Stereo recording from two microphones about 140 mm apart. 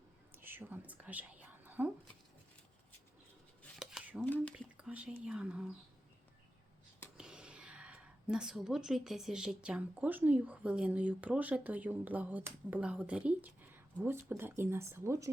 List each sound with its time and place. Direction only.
0.3 s speech: 15° right (ahead or behind)
3.8 s dishes: 5° right (ahead or behind)
4.5 s speech: 10° right (ahead or behind)
7.2 s speech: 5° right (ahead or behind)